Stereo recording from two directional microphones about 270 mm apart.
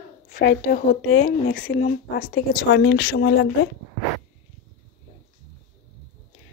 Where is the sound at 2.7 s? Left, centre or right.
Left.